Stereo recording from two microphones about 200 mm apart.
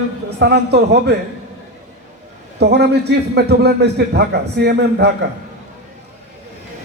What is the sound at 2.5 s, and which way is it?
A man's voice, 55° right (ahead or behind).